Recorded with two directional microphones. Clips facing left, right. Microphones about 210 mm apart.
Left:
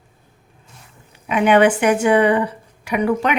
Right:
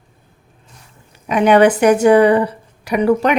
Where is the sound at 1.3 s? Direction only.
40° right (ahead or behind).